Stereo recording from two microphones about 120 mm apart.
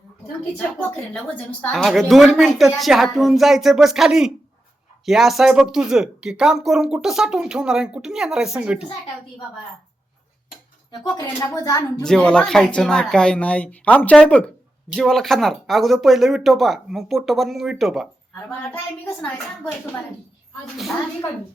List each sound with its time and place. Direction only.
0.9 s speech: 10° left (ahead or behind)
1.7 s speech: centre (ahead or behind)
11.3 s a woman's voice: 25° left (ahead or behind)
12.0 s speech: 5° left (ahead or behind)
18.7 s speech: 15° left (ahead or behind)